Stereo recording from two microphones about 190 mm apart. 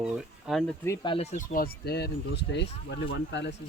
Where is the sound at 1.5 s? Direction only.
55° left (ahead or behind).